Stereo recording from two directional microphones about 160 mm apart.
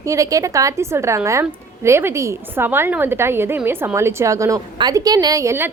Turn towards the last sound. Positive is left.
turn(degrees=-15)  # may be behind; listen again after turning